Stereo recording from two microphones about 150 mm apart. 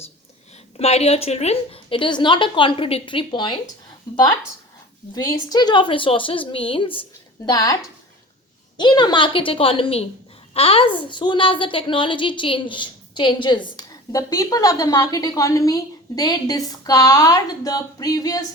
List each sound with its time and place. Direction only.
0.8 s a woman's voice: 45° left (ahead or behind)
7.4 s a woman's voice: 25° left (ahead or behind)
8.8 s a woman's voice: 30° left (ahead or behind)